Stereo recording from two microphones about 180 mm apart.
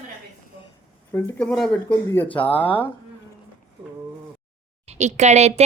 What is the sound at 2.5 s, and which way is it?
Speech, 30° left (ahead or behind).